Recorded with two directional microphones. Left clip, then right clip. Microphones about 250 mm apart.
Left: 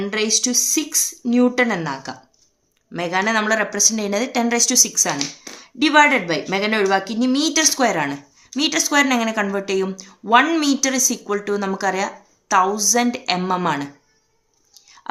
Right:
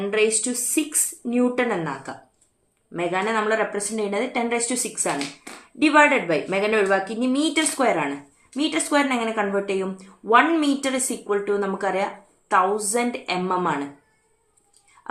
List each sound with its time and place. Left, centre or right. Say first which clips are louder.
0.1 s speech: left 2 dB; left